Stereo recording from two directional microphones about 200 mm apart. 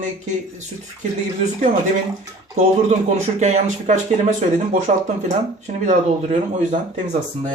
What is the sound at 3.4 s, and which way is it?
Speech, 35° right (ahead or behind).